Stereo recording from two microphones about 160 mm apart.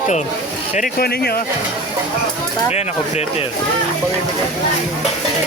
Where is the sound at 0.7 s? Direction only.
65° left (ahead or behind).